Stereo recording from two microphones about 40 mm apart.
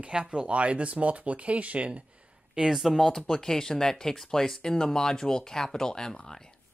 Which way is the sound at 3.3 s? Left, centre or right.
Centre.